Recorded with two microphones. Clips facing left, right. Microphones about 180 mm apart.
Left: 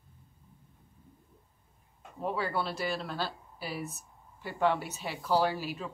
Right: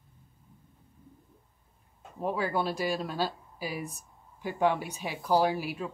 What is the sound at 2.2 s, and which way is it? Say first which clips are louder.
Speech: right 3 dB; 15° right (ahead or behind).